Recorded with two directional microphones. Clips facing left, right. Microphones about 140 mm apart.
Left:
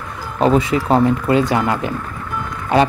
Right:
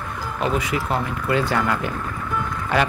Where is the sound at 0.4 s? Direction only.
30° left (ahead or behind).